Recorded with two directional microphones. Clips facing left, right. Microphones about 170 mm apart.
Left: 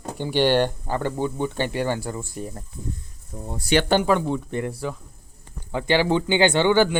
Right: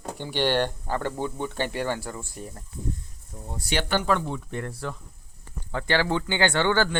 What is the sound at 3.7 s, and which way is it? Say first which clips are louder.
Speech: left 8 dB; 70° left (ahead or behind).